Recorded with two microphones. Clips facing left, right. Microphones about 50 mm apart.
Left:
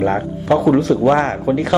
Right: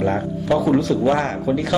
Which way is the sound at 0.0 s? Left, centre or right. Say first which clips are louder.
Left 3 dB; left.